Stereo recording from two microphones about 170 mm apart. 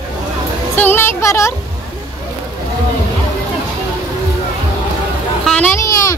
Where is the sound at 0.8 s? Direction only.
10° left (ahead or behind).